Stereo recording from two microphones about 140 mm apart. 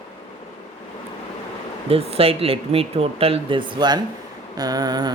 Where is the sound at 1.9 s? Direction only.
45° right (ahead or behind).